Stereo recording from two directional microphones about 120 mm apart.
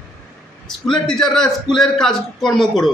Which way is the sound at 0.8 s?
5° left (ahead or behind).